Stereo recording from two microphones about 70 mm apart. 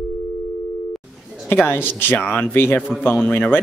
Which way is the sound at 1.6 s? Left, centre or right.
Left.